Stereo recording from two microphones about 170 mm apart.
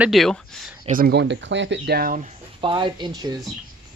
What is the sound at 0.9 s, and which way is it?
Speech, 55° right (ahead or behind).